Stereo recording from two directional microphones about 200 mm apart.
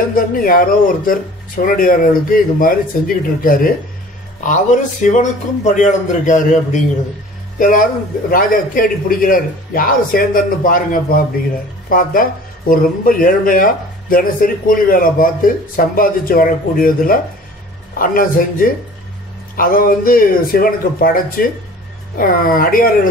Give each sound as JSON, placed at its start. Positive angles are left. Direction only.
{"t": 0.1, "sound": "speech", "side_deg": 45}